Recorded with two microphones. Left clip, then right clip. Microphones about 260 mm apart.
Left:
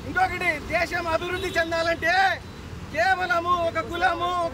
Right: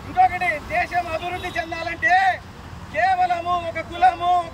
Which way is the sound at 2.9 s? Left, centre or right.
Centre.